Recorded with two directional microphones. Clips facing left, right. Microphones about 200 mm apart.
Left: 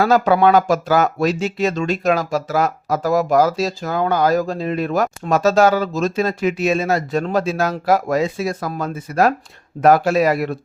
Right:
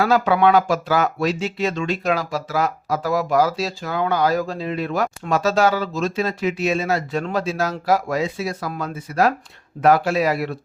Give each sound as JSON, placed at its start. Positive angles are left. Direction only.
{"t": 0.0, "sound": "speech", "side_deg": 45}